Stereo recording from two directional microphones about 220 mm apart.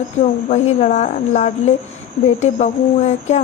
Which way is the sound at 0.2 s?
30° left (ahead or behind).